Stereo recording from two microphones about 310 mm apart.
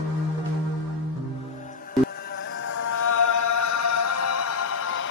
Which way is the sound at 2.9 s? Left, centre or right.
Left.